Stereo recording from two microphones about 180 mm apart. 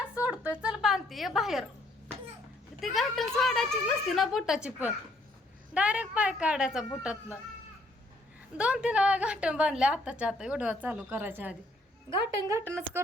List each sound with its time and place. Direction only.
0.0 s music: 5° right (ahead or behind)
0.5 s a woman's voice: 5° right (ahead or behind)
2.8 s a woman's voice: centre (ahead or behind)
8.5 s a woman's voice: 5° right (ahead or behind)